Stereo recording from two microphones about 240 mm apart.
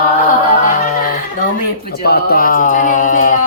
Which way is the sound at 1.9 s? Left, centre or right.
Left.